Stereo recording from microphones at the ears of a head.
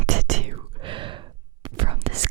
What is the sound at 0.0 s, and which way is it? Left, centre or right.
Whispering, right.